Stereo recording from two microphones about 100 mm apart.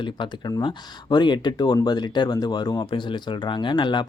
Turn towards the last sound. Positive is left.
turn(degrees=50)  # may be behind; listen again after turning